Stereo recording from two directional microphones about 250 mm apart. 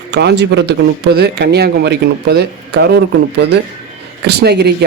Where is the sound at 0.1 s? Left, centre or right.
Right.